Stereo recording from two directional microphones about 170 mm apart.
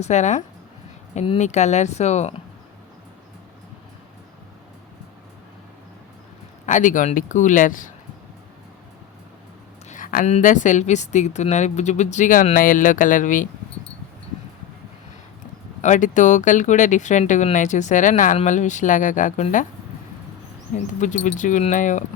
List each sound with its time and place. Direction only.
0.0 s speech: 40° left (ahead or behind)
6.7 s speech: 45° left (ahead or behind)
9.9 s a sound: 55° left (ahead or behind)
10.3 s speech: 45° left (ahead or behind)
15.8 s speech: 45° left (ahead or behind)
20.7 s speech: 45° left (ahead or behind)